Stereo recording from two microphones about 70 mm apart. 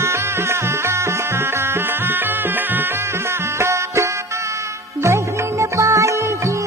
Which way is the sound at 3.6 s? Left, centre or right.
Right.